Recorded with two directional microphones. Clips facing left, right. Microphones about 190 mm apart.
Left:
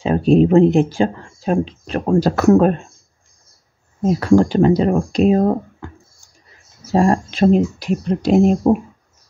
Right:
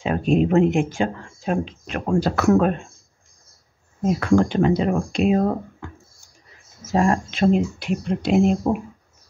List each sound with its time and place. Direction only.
0.0 s speech: 35° left (ahead or behind)
4.0 s speech: 35° left (ahead or behind)